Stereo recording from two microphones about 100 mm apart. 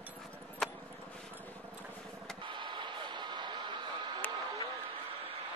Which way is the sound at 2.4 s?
55° right (ahead or behind).